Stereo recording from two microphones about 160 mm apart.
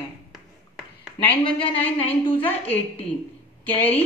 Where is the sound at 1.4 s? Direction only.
35° left (ahead or behind).